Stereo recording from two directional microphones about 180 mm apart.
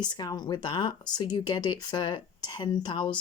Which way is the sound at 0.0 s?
25° left (ahead or behind).